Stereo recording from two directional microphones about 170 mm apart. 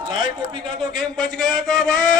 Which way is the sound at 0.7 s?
5° left (ahead or behind).